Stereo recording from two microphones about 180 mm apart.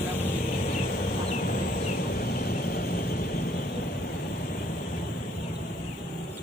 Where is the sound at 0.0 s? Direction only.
35° left (ahead or behind); by 3.6 s 55° left (ahead or behind).